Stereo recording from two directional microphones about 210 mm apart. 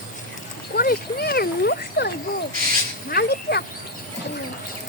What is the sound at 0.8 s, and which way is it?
Speech, 45° left (ahead or behind).